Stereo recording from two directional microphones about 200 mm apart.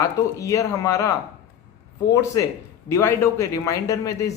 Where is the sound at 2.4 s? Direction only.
20° left (ahead or behind).